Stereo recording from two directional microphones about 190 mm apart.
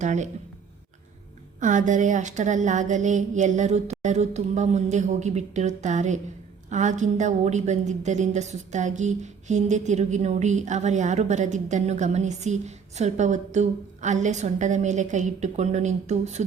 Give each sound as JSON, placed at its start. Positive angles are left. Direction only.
{"t": 0.0, "sound": "a woman's voice", "side_deg": -40}
{"t": 1.5, "sound": "a woman's voice", "side_deg": -40}